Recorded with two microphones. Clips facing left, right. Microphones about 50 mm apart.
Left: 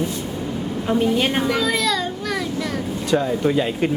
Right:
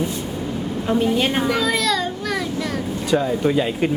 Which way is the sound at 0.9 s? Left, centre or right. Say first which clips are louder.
Even; centre.